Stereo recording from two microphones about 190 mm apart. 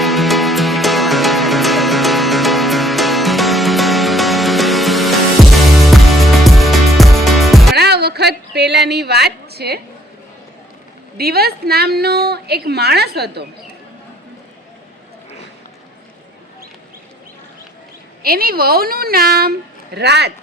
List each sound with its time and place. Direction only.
0.0 s music: centre (ahead or behind)
7.8 s a sound: 60° right (ahead or behind)
11.2 s a woman's voice: 55° right (ahead or behind)
18.2 s a woman's voice: 50° right (ahead or behind)